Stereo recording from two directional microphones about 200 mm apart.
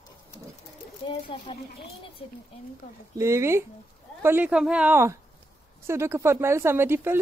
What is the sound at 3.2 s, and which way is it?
Speech, 15° right (ahead or behind).